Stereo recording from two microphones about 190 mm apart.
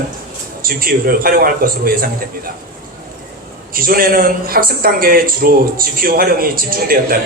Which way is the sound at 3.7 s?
50° right (ahead or behind).